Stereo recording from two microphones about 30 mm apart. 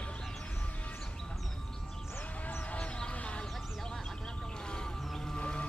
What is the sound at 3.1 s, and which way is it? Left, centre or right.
Vehicle, left.